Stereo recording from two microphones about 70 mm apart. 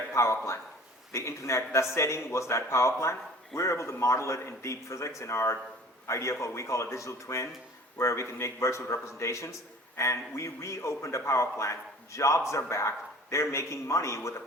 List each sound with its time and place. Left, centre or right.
0.1 s a man's voice: left